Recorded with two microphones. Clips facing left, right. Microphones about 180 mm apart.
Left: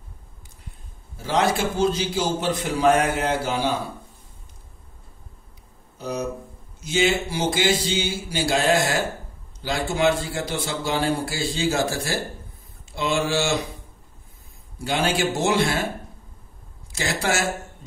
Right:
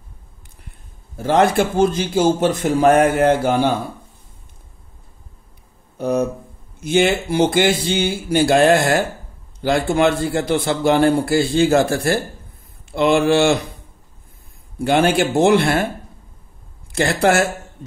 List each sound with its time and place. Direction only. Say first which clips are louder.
1.1 s a man's voice: right 7 dB; 55° right (ahead or behind)
5.9 s a sound: right 10 dB; 55° right (ahead or behind)
6.8 s a man's voice: right 5 dB; 60° right (ahead or behind)
14.8 s a man's voice: right 7 dB; 55° right (ahead or behind)
16.9 s a man's voice: right 9 dB; 60° right (ahead or behind)